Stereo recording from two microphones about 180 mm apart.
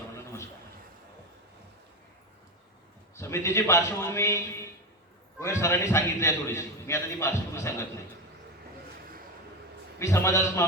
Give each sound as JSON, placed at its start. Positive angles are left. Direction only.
{"t": 3.2, "sound": "a man's voice", "side_deg": 15}
{"t": 10.0, "sound": "a man's voice", "side_deg": 15}